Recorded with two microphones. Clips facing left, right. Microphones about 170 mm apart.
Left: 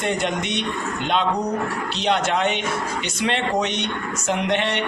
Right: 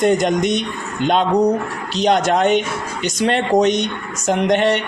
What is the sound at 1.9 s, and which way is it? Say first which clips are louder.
A man's voice: right 7 dB; 40° right (ahead or behind).